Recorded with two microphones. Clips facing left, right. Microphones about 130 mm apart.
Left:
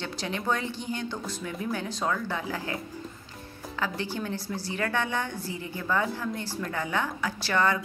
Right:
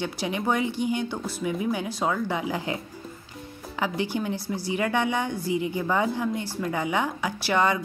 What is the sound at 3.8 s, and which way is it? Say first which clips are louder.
Speech: right 4 dB; 15° right (ahead or behind).